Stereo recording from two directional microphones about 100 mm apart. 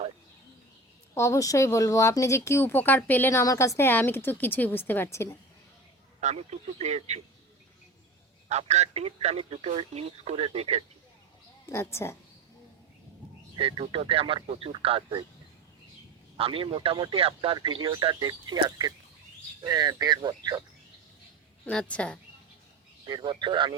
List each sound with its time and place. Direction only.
1.1 s speech: 30° left (ahead or behind)
3.4 s speech: 35° left (ahead or behind)
6.1 s speech: 90° right
8.5 s speech: 90° right
11.6 s speech: 25° left (ahead or behind)
13.6 s speech: 60° right (ahead or behind)
16.4 s speech: 65° right (ahead or behind)
17.6 s speech: 55° right (ahead or behind)
21.6 s a woman's voice: 10° left (ahead or behind)
23.0 s speech: 45° right (ahead or behind)